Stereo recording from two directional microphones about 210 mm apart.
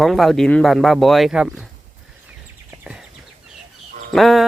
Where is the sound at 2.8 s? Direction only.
5° right (ahead or behind).